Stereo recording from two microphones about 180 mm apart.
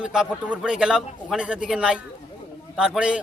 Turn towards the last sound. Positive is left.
turn(degrees=-5)  # may be behind; listen again after turning